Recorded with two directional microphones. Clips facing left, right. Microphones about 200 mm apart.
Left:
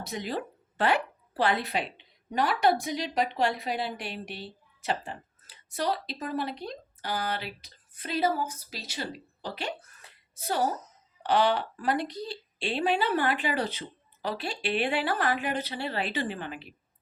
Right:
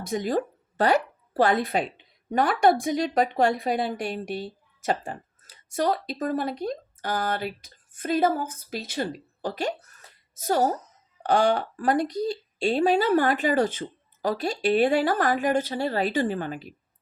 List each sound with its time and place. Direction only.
0.0 s a woman's voice: 45° right (ahead or behind)